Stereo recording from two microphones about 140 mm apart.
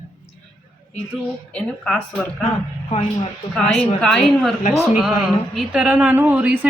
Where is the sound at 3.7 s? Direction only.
45° left (ahead or behind).